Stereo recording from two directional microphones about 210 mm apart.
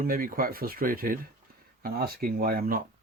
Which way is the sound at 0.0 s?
40° right (ahead or behind).